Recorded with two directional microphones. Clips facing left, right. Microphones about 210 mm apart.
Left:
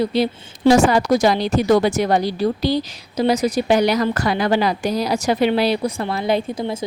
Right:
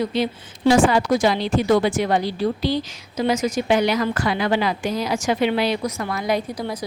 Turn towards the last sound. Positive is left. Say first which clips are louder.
# left 3 dB
turn(degrees=25)  # may be behind; listen again after turning